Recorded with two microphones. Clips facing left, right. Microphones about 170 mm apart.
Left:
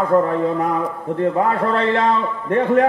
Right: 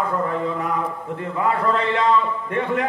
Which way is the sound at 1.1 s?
40° left (ahead or behind).